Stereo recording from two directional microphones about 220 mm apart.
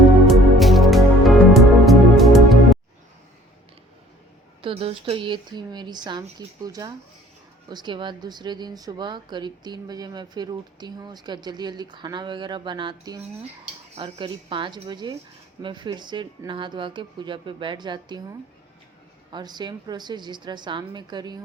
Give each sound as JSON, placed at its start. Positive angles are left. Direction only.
{"t": 0.3, "sound": "music", "side_deg": 0}
{"t": 4.6, "sound": "speech", "side_deg": -25}